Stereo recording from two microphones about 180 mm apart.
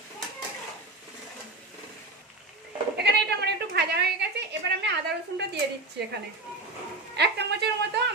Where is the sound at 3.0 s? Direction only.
70° right (ahead or behind).